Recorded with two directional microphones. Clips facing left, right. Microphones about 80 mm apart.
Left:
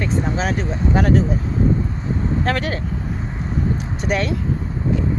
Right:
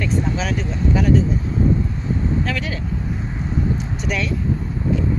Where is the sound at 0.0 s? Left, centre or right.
Left.